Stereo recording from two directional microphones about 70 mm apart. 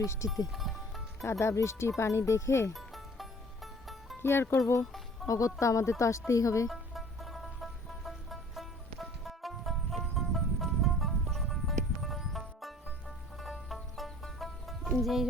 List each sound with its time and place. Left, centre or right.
0.0 s speech: left
0.5 s music: centre
1.2 s speech: left
2.7 s music: centre
4.2 s speech: left
4.5 s speech: left
4.9 s music: centre
5.5 s speech: left
6.7 s music: centre